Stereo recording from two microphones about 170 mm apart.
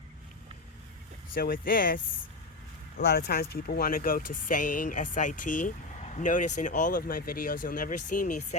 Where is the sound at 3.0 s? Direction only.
70° left (ahead or behind).